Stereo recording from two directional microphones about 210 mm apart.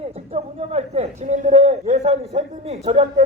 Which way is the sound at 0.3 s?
30° right (ahead or behind).